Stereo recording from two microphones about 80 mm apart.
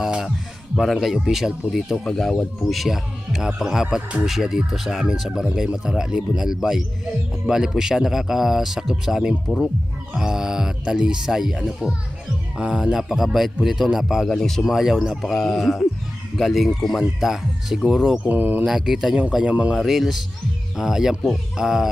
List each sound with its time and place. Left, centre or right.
0.0 s speech: centre
18.3 s speech: right
18.6 s speech: centre
19.7 s speech: centre